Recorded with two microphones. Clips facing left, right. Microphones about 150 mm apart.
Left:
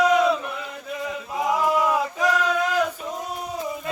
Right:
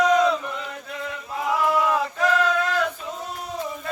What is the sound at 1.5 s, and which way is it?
Male singing, 15° left (ahead or behind).